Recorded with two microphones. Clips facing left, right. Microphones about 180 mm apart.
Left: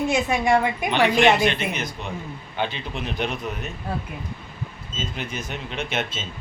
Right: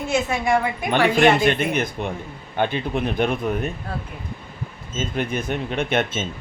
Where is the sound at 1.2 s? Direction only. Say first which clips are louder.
Right 3 dB; 50° right (ahead or behind).